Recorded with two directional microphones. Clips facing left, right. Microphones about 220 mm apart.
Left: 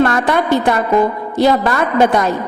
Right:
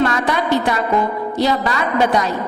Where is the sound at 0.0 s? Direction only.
55° left (ahead or behind).